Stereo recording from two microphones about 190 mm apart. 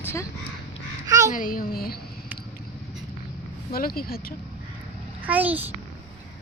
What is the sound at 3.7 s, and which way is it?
Speech, 50° left (ahead or behind).